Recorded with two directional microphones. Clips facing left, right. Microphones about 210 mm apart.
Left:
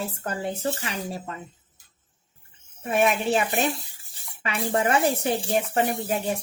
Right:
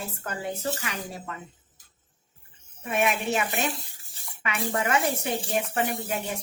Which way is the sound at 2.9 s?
30° left (ahead or behind).